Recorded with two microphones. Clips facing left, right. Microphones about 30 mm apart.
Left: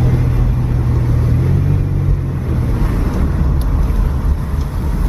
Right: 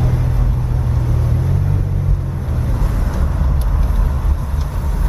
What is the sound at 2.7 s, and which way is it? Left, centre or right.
Vehicle, left.